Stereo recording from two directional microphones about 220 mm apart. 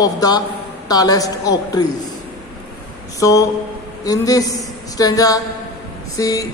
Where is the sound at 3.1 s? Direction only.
15° left (ahead or behind).